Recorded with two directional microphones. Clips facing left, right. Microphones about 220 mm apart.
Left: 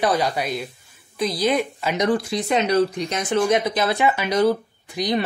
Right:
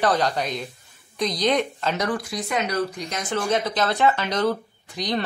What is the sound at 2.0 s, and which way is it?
Speech, 25° left (ahead or behind).